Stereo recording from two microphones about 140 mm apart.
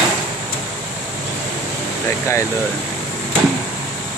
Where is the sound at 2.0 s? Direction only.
20° left (ahead or behind).